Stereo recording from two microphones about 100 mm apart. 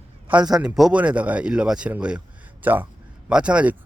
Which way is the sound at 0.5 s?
5° right (ahead or behind).